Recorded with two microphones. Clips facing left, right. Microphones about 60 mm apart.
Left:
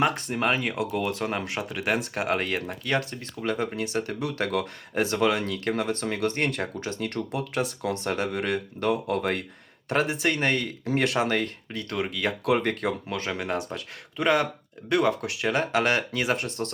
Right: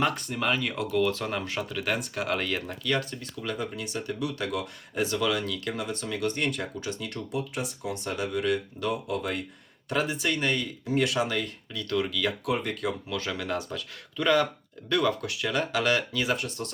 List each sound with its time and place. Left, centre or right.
0.2 s speech: left
12.5 s speech: left
12.8 s speech: left